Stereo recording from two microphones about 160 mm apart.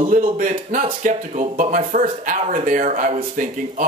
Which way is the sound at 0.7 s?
60° right (ahead or behind).